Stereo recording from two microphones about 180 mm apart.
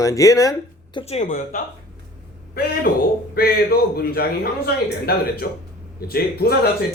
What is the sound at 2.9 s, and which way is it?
A man's voice, 55° left (ahead or behind).